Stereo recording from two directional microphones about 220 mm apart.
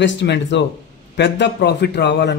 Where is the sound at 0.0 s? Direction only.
50° left (ahead or behind).